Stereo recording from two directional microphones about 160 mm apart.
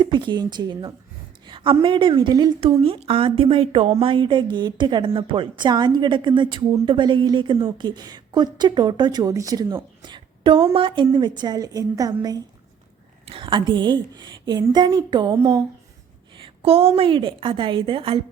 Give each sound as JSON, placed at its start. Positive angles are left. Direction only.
{"t": 0.0, "sound": "a woman's voice", "side_deg": -30}